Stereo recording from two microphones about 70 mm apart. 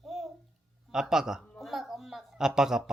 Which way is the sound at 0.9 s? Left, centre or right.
Centre.